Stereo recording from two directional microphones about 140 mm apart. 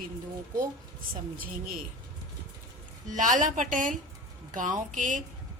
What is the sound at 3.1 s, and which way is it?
A woman's voice, 65° right (ahead or behind).